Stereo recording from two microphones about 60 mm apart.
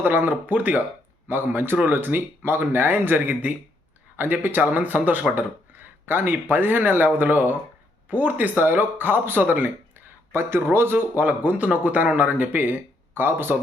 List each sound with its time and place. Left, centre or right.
0.0 s speech: right